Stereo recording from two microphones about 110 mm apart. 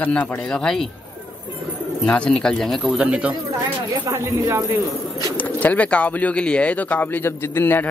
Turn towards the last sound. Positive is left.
turn(degrees=20)  # may be behind; listen again after turning